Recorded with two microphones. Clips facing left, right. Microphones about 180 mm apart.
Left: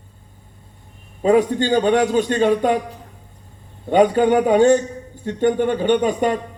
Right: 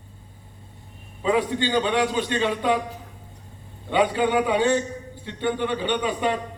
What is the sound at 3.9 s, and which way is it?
A man's voice, 45° left (ahead or behind).